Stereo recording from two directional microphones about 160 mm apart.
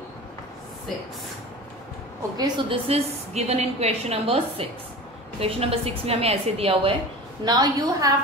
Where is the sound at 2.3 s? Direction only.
30° right (ahead or behind).